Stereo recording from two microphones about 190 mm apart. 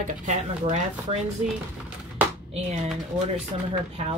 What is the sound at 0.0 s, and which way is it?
Speech, 35° right (ahead or behind).